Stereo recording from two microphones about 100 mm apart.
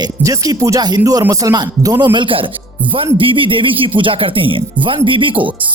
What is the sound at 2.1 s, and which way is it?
Speech, 60° right (ahead or behind).